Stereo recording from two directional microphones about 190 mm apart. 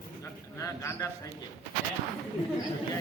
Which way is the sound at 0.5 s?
15° left (ahead or behind).